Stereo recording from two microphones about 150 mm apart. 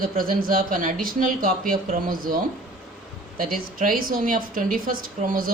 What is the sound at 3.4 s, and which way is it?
Speech, 65° right (ahead or behind).